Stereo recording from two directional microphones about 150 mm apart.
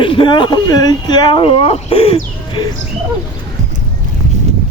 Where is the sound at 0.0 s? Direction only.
35° left (ahead or behind).